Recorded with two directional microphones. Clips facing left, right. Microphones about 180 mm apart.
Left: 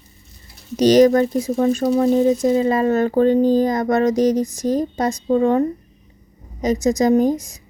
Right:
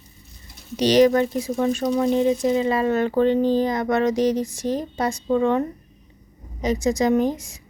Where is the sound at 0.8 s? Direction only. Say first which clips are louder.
Left 4 dB; 45° left (ahead or behind).